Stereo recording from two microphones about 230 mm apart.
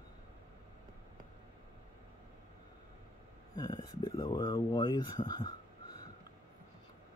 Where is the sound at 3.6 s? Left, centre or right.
Centre.